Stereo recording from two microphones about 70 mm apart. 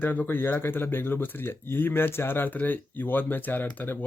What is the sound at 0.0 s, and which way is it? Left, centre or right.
Speech, left.